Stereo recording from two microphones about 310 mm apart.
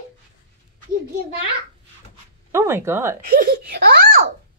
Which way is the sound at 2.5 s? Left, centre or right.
Centre.